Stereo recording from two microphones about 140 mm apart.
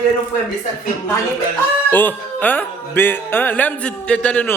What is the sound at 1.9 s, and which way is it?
Speech, 15° left (ahead or behind).